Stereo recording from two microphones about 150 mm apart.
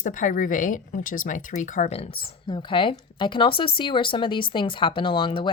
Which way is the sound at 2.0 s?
35° left (ahead or behind).